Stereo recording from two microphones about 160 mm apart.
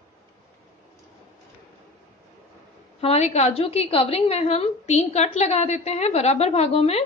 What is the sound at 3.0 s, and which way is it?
A woman's voice, 40° left (ahead or behind).